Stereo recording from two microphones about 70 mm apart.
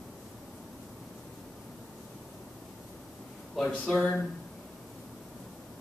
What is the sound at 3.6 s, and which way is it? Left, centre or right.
Speech, centre.